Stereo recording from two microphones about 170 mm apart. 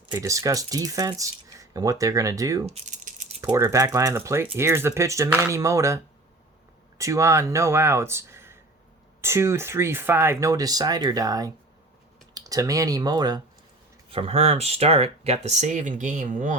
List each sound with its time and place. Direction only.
0.1 s speech: 20° right (ahead or behind)
2.6 s rattle: 45° right (ahead or behind)
3.4 s speech: 20° right (ahead or behind)
7.0 s speech: 15° right (ahead or behind)
14.1 s speech: 35° right (ahead or behind); by 16.6 s 50° right (ahead or behind)